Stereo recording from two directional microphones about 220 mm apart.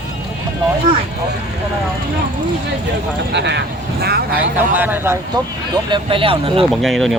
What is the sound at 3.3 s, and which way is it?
Speech, 50° right (ahead or behind).